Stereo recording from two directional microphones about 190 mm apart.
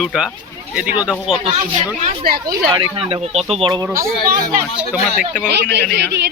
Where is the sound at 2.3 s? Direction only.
20° right (ahead or behind).